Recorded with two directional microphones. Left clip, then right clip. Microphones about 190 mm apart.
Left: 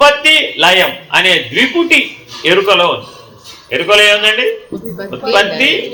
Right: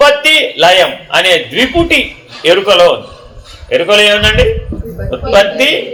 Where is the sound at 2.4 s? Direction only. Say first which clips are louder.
Right 3 dB; 55° right (ahead or behind).